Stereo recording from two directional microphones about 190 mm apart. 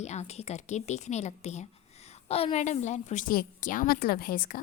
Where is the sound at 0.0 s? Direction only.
35° left (ahead or behind).